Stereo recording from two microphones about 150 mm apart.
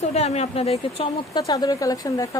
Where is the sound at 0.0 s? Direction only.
45° left (ahead or behind).